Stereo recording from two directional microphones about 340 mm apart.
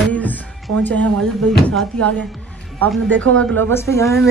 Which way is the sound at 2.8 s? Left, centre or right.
Right.